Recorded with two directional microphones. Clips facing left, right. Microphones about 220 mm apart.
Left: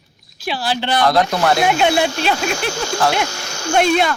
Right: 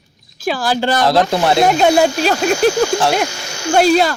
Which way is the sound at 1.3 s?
25° right (ahead or behind).